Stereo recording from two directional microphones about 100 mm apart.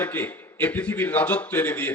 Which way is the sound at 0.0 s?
20° left (ahead or behind).